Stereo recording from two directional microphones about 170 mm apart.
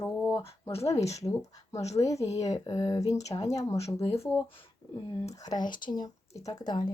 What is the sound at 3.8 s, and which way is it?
Speech, 35° left (ahead or behind).